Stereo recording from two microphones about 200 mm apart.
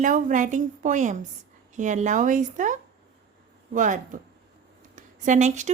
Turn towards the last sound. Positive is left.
turn(degrees=-35)  # may be behind; listen again after turning